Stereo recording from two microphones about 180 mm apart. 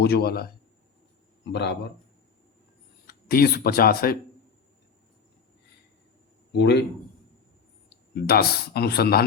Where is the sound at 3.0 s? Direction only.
60° left (ahead or behind).